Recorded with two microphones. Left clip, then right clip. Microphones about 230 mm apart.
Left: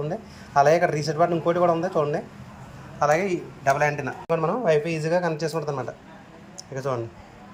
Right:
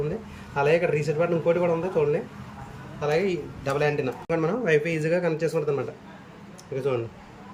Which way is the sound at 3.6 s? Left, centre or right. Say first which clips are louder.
Left 3 dB; centre.